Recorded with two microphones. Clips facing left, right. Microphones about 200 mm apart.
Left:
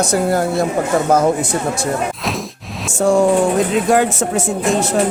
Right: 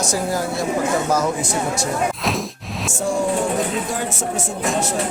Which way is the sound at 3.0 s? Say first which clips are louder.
Left 8 dB; 70° left (ahead or behind).